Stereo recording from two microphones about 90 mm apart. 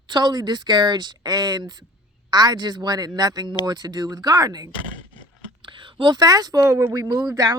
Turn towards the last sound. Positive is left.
turn(degrees=-45)  # may be behind; listen again after turning